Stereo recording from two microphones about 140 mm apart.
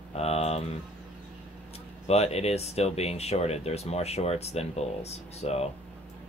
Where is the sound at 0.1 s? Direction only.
45° left (ahead or behind).